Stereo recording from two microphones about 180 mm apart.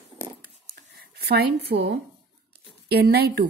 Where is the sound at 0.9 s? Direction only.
60° right (ahead or behind).